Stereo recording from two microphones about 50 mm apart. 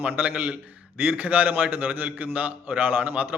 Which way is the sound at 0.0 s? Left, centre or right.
Right.